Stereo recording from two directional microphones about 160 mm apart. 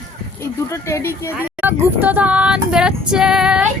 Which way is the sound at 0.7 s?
15° left (ahead or behind).